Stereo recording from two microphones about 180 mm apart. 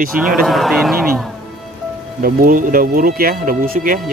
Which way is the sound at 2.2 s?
50° right (ahead or behind).